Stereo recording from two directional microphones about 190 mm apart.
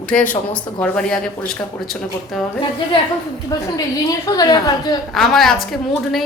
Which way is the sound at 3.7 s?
20° left (ahead or behind).